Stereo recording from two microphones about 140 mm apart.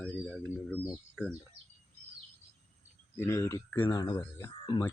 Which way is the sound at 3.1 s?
20° left (ahead or behind).